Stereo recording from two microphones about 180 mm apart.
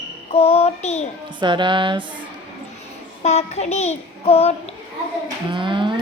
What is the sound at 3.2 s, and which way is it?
Child singing, 35° left (ahead or behind).